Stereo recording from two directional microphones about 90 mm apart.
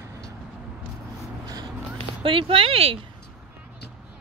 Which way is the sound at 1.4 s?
45° right (ahead or behind).